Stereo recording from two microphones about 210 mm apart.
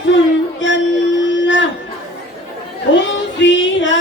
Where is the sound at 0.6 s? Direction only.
60° left (ahead or behind).